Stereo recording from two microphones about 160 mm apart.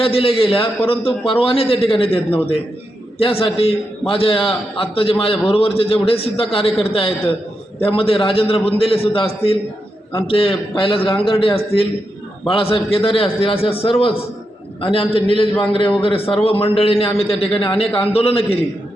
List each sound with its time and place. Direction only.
0.0 s a man's voice: 35° left (ahead or behind)